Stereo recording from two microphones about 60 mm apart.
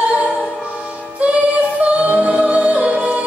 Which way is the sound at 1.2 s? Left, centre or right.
Right.